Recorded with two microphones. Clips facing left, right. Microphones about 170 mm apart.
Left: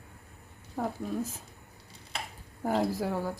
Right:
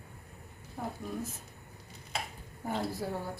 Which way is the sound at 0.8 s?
90° left.